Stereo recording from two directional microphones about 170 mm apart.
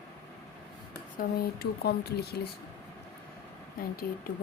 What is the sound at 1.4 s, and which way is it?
Speech, 65° left (ahead or behind).